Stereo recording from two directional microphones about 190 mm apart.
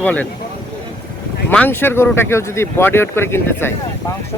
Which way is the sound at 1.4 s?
10° left (ahead or behind).